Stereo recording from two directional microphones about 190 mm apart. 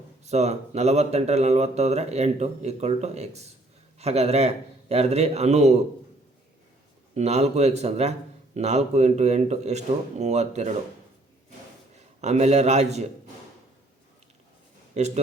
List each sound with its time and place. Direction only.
0.3 s speech: 35° right (ahead or behind)
7.1 s speech: 35° right (ahead or behind)
11.9 s a man's voice: 35° right (ahead or behind)
14.9 s speech: 35° right (ahead or behind)